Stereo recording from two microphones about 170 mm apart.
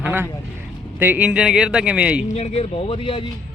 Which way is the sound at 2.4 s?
35° left (ahead or behind).